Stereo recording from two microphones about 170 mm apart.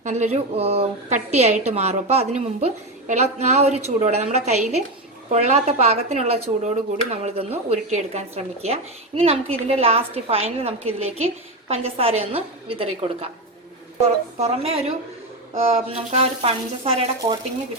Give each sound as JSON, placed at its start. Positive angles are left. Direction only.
{"t": 0.0, "sound": "a woman's voice", "side_deg": -45}